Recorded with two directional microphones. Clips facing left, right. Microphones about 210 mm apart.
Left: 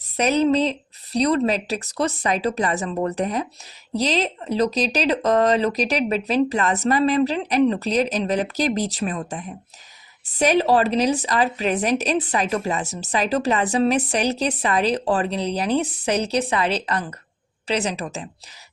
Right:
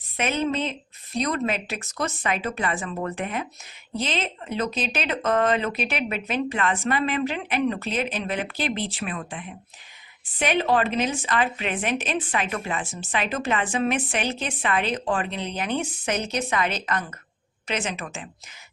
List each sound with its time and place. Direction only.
0.2 s a woman's voice: 40° left (ahead or behind)